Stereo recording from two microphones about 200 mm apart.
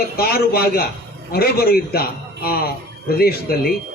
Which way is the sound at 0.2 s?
50° left (ahead or behind).